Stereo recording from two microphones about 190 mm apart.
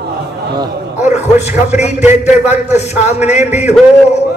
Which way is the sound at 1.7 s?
35° left (ahead or behind).